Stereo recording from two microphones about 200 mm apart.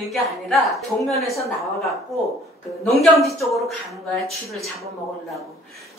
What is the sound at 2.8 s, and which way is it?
A woman's voice, centre (ahead or behind).